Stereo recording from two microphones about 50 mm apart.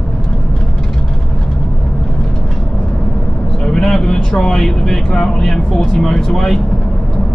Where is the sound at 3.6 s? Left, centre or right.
Centre.